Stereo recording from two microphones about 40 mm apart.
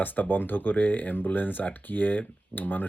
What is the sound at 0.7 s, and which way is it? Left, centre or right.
Speech, left.